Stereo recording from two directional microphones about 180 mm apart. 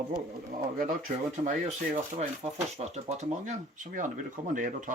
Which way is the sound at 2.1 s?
40° right (ahead or behind).